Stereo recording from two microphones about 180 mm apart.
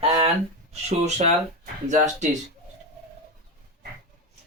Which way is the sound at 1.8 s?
40° right (ahead or behind).